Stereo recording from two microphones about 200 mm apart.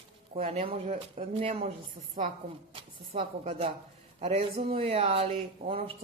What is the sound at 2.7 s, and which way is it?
A woman's voice, 30° right (ahead or behind).